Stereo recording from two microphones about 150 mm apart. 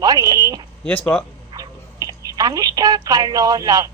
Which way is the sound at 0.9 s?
10° left (ahead or behind).